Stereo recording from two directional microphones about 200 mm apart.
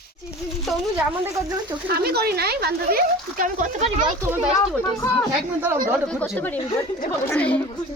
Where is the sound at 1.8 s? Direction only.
50° right (ahead or behind).